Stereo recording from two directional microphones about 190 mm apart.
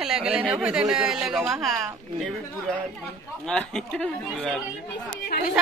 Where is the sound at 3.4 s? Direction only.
5° left (ahead or behind).